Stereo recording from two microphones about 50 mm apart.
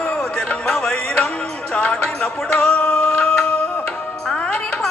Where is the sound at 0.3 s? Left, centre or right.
Centre.